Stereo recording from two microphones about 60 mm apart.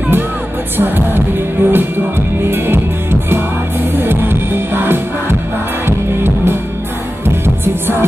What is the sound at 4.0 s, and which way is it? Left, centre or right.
Music, right.